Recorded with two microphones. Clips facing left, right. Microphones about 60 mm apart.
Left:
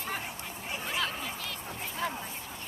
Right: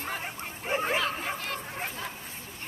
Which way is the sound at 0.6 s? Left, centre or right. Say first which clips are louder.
Right 6 dB; right.